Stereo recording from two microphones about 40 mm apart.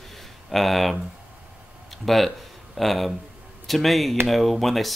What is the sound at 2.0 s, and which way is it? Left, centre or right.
Speech, centre.